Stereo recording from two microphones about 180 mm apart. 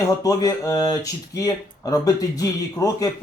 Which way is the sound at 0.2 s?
20° left (ahead or behind).